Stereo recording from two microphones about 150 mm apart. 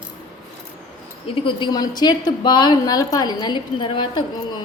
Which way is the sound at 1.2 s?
35° left (ahead or behind).